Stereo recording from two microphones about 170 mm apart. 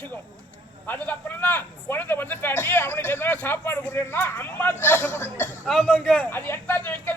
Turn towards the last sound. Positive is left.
turn(degrees=10)  # may be behind; listen again after turning